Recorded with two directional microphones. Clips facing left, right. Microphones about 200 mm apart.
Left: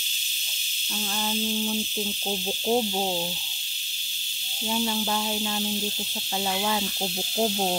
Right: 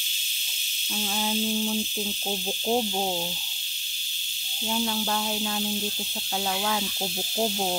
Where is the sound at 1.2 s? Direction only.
5° right (ahead or behind).